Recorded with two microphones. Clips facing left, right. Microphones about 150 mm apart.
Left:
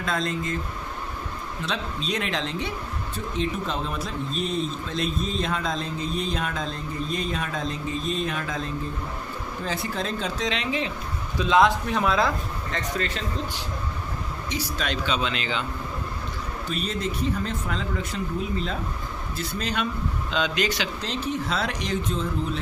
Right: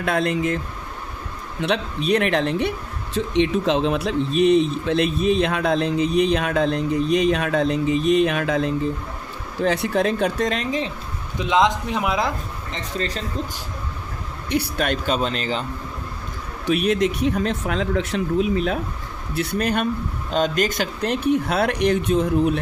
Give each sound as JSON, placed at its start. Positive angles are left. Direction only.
{"t": 0.0, "sound": "speech", "side_deg": -65}
{"t": 1.6, "sound": "speech", "side_deg": -65}
{"t": 3.2, "sound": "speech", "side_deg": -75}
{"t": 11.3, "sound": "a man's voice", "side_deg": -20}
{"t": 13.0, "sound": "speech", "side_deg": -40}
{"t": 14.5, "sound": "speech", "side_deg": -60}
{"t": 16.6, "sound": "speech", "side_deg": -70}
{"t": 18.5, "sound": "speech", "side_deg": -65}